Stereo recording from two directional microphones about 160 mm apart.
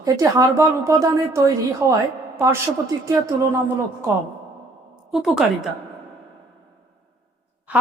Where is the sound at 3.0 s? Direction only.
20° right (ahead or behind).